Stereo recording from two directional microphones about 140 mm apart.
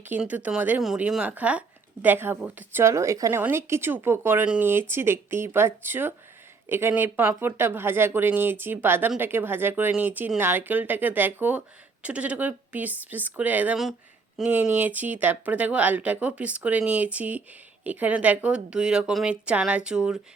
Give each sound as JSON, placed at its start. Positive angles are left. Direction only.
{"t": 0.0, "sound": "speech", "side_deg": -10}